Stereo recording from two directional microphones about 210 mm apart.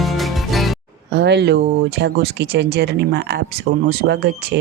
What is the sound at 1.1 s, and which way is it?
Speech, 55° right (ahead or behind).